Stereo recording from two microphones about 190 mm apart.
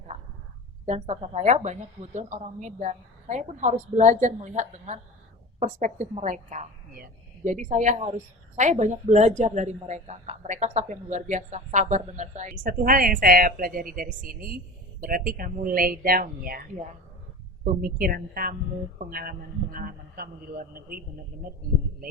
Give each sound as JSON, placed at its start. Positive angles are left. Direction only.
{"t": 0.9, "sound": "a woman's voice", "side_deg": -35}
{"t": 17.7, "sound": "a man's voice", "side_deg": -50}